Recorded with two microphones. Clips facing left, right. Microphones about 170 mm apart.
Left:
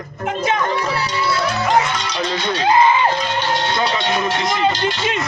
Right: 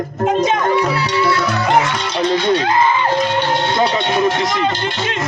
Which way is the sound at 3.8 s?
20° right (ahead or behind).